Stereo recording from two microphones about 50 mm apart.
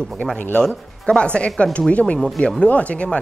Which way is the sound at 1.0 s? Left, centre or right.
Left.